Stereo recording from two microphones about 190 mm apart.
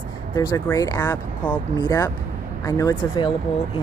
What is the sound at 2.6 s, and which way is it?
Speech, 15° left (ahead or behind).